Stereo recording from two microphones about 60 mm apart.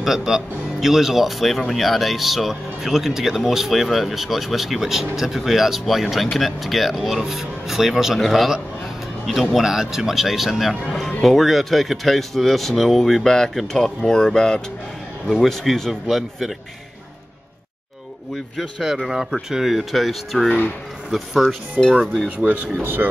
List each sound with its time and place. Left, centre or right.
0.0 s speech: centre
18.6 s speech: centre
21.7 s speech: centre
22.0 s speech: centre
22.4 s speech: right